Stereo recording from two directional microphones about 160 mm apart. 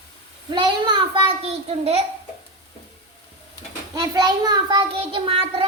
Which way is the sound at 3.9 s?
25° right (ahead or behind).